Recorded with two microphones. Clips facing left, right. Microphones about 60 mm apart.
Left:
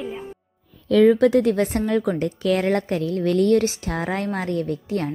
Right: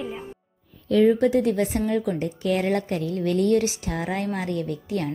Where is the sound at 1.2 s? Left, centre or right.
Left.